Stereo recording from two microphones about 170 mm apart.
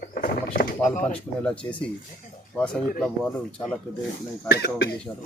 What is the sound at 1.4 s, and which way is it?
Speech, 5° left (ahead or behind).